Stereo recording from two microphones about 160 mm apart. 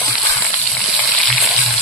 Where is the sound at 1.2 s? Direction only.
Centre (ahead or behind).